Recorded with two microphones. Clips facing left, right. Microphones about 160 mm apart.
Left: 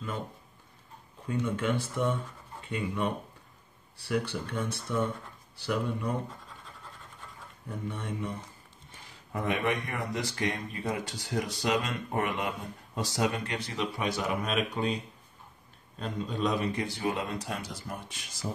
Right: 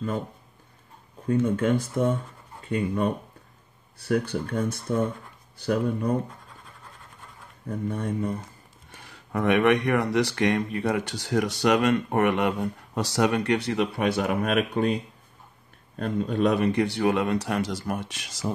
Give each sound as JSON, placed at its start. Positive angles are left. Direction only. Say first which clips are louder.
{"t": 1.2, "sound": "speech", "louder": "right 7 dB", "side_deg": -40}
{"t": 4.1, "sound": "speech", "louder": "right 6 dB", "side_deg": -50}
{"t": 7.6, "sound": "speech", "louder": "right 8 dB", "side_deg": -40}
{"t": 8.9, "sound": "speech", "louder": "right 7 dB", "side_deg": -70}
{"t": 16.0, "sound": "speech", "louder": "right 7 dB", "side_deg": -60}